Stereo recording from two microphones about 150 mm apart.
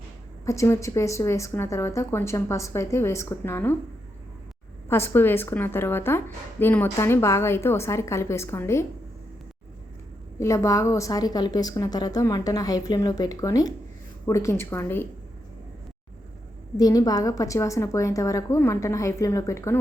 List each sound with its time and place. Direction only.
0.4 s a woman's voice: 20° left (ahead or behind)
4.9 s a woman's voice: 15° left (ahead or behind)
10.4 s a woman's voice: 20° left (ahead or behind)
16.7 s a woman's voice: 25° left (ahead or behind)